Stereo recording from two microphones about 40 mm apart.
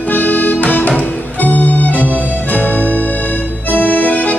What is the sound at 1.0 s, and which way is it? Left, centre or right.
Music, left.